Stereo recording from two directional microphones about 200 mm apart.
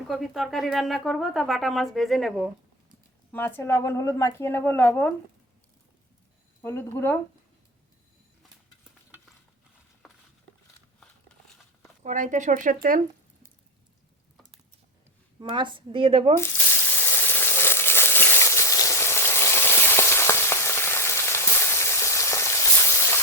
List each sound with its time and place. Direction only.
0.1 s speech: centre (ahead or behind)
3.3 s a woman's voice: 10° left (ahead or behind)
6.6 s a woman's voice: 15° left (ahead or behind)
12.0 s speech: 40° right (ahead or behind)
15.4 s speech: 25° right (ahead or behind)
16.4 s frying: 10° left (ahead or behind)